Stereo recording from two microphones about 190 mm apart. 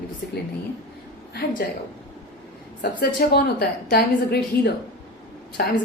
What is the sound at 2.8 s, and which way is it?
A woman's voice, 55° left (ahead or behind).